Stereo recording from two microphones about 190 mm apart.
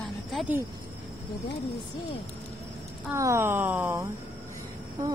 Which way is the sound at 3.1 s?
15° right (ahead or behind).